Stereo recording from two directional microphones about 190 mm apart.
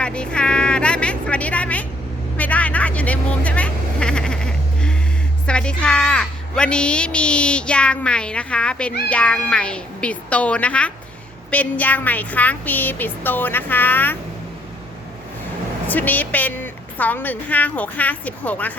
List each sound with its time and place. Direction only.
0.0 s a sound: 5° left (ahead or behind)
2.4 s quack: 10° left (ahead or behind)
5.5 s a woman's voice: 5° left (ahead or behind)
15.9 s a woman's voice: 10° left (ahead or behind)